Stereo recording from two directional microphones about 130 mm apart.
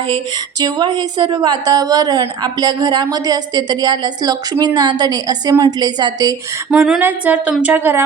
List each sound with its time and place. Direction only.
0.6 s a woman's voice: 35° right (ahead or behind)
6.7 s speech: 5° right (ahead or behind)